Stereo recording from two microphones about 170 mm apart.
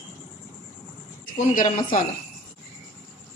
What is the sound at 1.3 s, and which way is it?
Speech, 50° left (ahead or behind).